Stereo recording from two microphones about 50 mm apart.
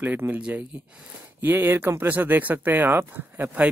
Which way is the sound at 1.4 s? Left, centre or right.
Right.